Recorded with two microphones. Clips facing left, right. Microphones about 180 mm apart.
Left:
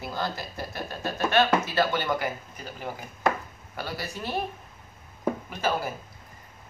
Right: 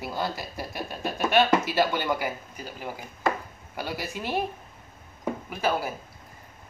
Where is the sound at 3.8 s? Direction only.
15° right (ahead or behind).